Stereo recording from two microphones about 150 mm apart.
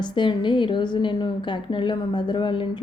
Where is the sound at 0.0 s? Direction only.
30° left (ahead or behind).